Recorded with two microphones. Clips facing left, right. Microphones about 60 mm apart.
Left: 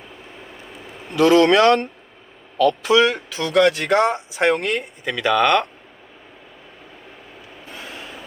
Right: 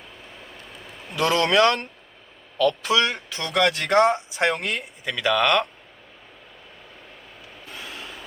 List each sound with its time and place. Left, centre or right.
1.0 s speech: centre
7.7 s vehicle: centre
7.9 s vehicle: centre